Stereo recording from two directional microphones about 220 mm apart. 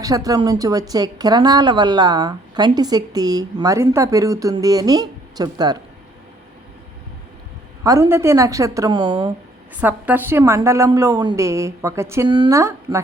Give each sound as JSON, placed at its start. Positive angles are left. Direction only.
{"t": 0.0, "sound": "speech", "side_deg": -15}
{"t": 7.9, "sound": "speech", "side_deg": -10}
{"t": 9.8, "sound": "speech", "side_deg": -10}